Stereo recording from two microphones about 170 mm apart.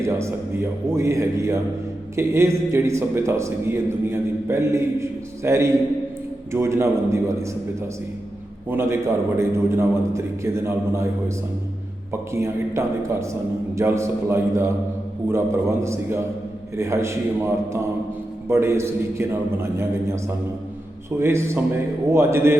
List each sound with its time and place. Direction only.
0.0 s a man's voice: 15° right (ahead or behind)
8.7 s a man's voice: 15° right (ahead or behind)
12.3 s a man's voice: 15° right (ahead or behind)